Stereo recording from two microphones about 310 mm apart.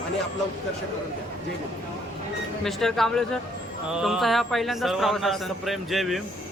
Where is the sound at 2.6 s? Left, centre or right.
Centre.